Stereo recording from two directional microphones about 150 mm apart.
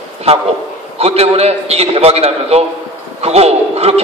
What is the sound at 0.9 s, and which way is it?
A man's voice, 45° right (ahead or behind).